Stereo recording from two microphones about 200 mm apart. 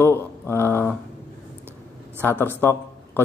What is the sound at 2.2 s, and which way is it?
Speech, 10° left (ahead or behind).